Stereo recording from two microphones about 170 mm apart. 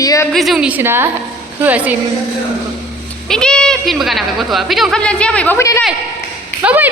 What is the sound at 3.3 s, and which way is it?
Speech, 5° left (ahead or behind).